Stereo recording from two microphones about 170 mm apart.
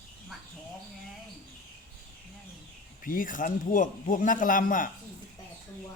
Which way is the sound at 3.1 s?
55° left (ahead or behind).